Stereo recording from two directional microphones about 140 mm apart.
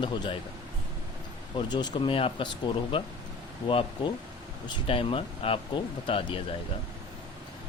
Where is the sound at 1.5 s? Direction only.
35° left (ahead or behind).